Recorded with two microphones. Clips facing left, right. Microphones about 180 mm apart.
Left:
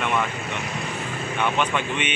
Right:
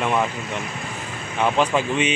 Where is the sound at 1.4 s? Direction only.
35° right (ahead or behind).